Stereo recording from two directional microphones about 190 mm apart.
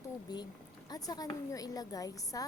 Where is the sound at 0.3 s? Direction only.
20° left (ahead or behind).